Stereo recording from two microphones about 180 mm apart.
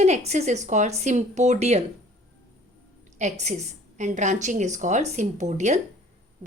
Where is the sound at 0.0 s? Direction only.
40° right (ahead or behind).